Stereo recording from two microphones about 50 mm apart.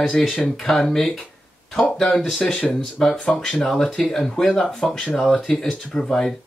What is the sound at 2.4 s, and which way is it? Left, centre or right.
Speech, centre.